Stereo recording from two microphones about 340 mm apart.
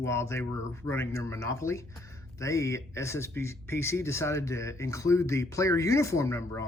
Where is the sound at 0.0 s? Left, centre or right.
Centre.